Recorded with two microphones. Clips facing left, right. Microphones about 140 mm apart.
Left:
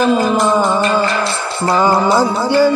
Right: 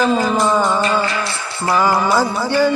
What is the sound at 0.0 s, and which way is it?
Music, 20° left (ahead or behind).